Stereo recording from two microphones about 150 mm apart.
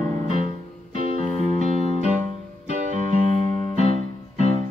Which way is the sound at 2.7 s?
55° right (ahead or behind).